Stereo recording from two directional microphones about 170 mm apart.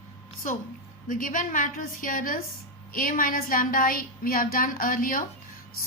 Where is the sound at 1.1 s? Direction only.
55° left (ahead or behind).